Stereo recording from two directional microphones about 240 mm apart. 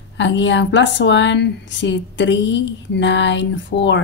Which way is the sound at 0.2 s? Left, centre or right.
Left.